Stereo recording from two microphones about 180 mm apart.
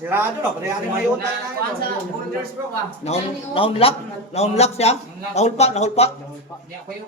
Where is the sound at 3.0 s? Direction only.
35° left (ahead or behind).